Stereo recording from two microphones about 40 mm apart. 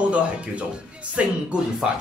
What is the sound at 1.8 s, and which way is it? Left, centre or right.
Speech, centre.